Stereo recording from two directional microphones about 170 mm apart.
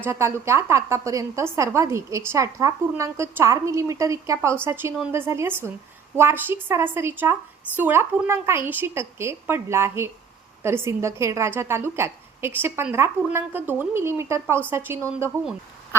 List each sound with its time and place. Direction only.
0.0 s a woman's voice: 15° right (ahead or behind)